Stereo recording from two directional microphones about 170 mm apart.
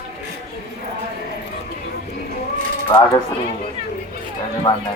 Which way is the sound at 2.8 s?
25° left (ahead or behind).